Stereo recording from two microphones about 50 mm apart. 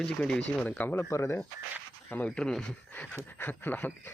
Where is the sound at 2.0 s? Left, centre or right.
Left.